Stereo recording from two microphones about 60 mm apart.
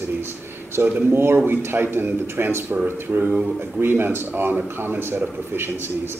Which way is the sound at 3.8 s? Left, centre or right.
Right.